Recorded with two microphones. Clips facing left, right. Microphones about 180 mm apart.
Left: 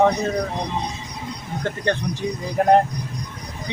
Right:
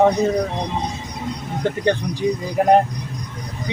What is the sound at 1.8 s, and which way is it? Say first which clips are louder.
Speech: right 4 dB; 15° right (ahead or behind).